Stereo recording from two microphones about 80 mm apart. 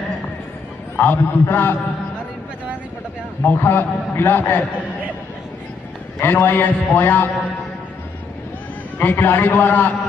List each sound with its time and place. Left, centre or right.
0.9 s a man's voice: left
3.4 s a man's voice: left
6.2 s a man's voice: left
8.9 s a man's voice: left